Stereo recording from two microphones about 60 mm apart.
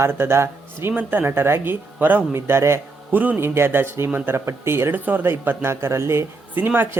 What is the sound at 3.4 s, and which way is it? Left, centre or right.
Speech, right.